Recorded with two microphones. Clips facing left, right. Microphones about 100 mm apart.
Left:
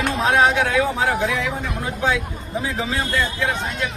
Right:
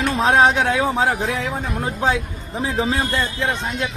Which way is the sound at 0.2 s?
30° right (ahead or behind).